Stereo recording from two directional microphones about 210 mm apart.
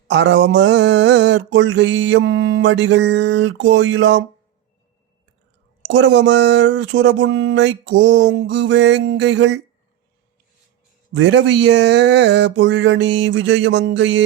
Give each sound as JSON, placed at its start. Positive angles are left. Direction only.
{"t": 0.1, "sound": "mantra", "side_deg": -55}
{"t": 5.9, "sound": "mantra", "side_deg": -60}
{"t": 11.1, "sound": "mantra", "side_deg": -55}